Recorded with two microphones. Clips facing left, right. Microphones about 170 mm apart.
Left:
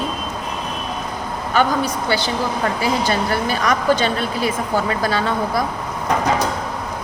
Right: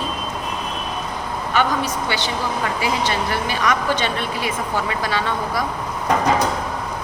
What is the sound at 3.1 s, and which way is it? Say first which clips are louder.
Speech: left 3 dB; 40° left (ahead or behind).